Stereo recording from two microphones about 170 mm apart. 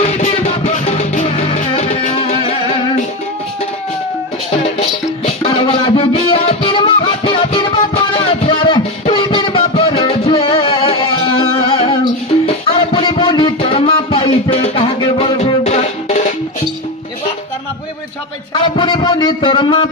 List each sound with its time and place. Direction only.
0.0 s music: 40° left (ahead or behind)
4.7 s music: 35° left (ahead or behind)
18.5 s a sound: 30° left (ahead or behind)